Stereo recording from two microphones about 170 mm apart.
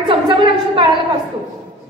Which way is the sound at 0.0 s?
30° right (ahead or behind).